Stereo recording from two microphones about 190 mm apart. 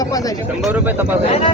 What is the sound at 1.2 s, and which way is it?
Speech, 30° left (ahead or behind).